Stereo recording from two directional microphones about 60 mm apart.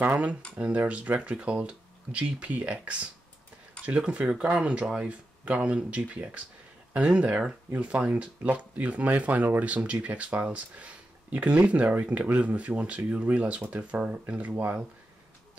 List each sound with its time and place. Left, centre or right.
0.0 s speech: right
0.6 s speech: right